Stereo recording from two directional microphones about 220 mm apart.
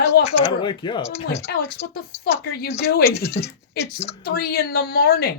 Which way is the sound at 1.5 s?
45° left (ahead or behind).